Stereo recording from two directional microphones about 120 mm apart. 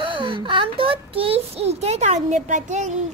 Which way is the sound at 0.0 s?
45° right (ahead or behind).